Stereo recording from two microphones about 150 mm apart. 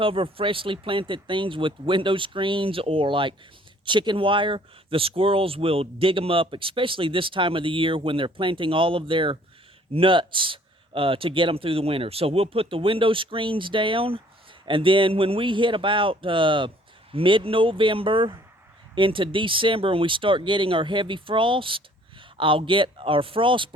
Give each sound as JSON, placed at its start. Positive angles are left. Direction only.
{"t": 0.0, "sound": "speech", "side_deg": -35}